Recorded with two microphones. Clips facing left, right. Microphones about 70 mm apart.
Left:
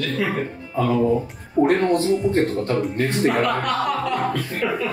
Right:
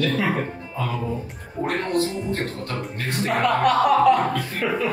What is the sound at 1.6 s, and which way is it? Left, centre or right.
Speech, left.